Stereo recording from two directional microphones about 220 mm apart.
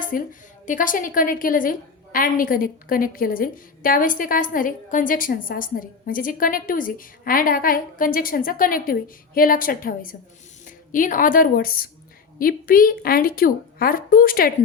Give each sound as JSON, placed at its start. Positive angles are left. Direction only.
{"t": 0.0, "sound": "a woman's voice", "side_deg": 40}